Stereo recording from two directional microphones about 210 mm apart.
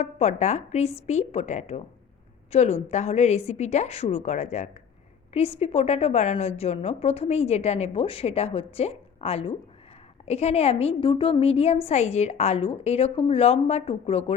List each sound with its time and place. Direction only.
0.0 s a woman's voice: 30° left (ahead or behind)